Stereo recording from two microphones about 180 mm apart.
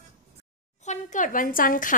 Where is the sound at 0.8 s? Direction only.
45° left (ahead or behind).